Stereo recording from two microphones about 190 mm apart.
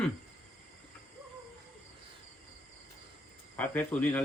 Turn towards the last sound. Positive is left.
turn(degrees=10)  # may be behind; listen again after turning